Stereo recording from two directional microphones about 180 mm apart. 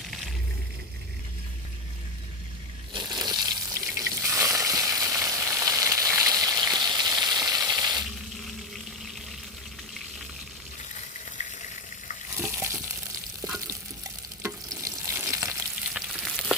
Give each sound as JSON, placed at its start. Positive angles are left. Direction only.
{"t": 2.9, "sound": "water", "side_deg": -25}
{"t": 12.4, "sound": "water", "side_deg": -15}
{"t": 14.4, "sound": "stir", "side_deg": -15}
{"t": 15.9, "sound": "frying", "side_deg": -5}